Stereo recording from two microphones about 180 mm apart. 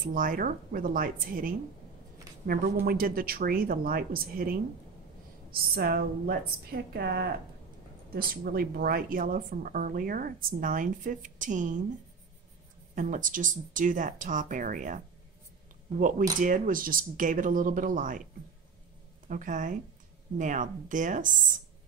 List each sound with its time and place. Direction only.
0.0 s speech: 50° right (ahead or behind)
12.9 s speech: 45° right (ahead or behind)
16.0 s speech: 45° right (ahead or behind)
19.2 s speech: 45° right (ahead or behind)